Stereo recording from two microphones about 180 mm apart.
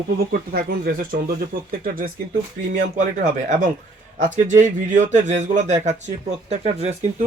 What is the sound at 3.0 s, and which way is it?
A man's voice, 45° right (ahead or behind).